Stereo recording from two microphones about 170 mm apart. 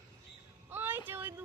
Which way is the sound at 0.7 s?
10° right (ahead or behind).